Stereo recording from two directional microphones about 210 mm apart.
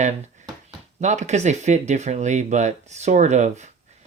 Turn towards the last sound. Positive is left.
turn(degrees=-35)  # may be behind; listen again after turning